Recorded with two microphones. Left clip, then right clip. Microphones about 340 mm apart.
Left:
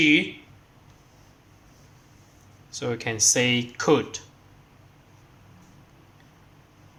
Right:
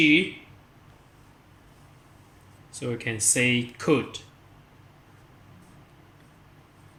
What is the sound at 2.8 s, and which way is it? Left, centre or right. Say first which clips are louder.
Speech: left 5 dB; centre.